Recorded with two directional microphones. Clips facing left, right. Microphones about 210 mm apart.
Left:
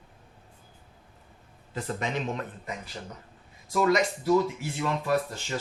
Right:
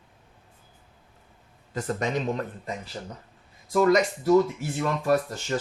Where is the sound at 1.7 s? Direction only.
45° right (ahead or behind).